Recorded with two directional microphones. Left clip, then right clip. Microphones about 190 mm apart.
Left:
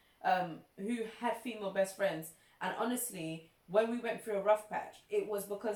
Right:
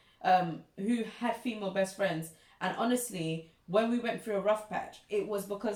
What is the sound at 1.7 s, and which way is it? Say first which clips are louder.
A woman's voice: right 2 dB; 15° right (ahead or behind).